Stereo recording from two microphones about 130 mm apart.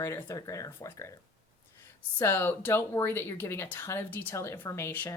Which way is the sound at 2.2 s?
20° left (ahead or behind).